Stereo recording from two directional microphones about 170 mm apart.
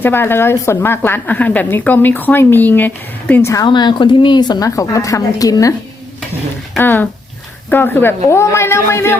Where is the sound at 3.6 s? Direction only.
25° left (ahead or behind).